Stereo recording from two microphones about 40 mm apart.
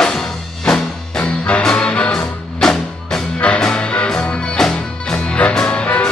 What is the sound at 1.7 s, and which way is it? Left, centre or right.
Music, left.